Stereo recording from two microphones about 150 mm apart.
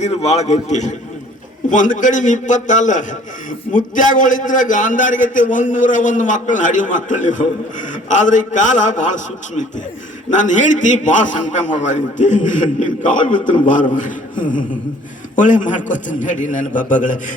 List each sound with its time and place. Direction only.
0.0 s a man's voice: 45° left (ahead or behind)